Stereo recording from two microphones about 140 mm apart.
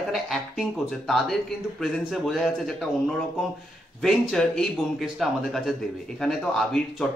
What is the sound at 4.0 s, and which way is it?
Speech, 5° left (ahead or behind).